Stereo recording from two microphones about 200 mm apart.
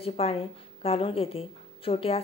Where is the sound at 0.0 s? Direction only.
30° left (ahead or behind).